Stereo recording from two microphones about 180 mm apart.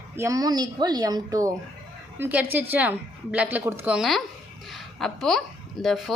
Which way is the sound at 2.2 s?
10° right (ahead or behind).